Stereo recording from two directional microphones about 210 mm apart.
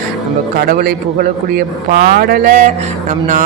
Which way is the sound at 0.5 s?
45° right (ahead or behind).